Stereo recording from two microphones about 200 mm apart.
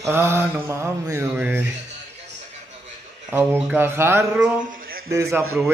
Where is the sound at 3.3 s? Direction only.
10° right (ahead or behind).